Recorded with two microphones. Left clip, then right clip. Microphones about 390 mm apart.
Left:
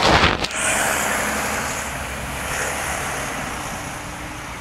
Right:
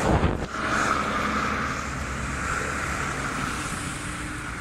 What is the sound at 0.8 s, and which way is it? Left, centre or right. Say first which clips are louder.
Vehicle: left 4 dB; centre.